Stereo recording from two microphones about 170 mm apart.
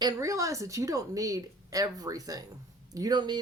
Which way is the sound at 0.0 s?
20° right (ahead or behind).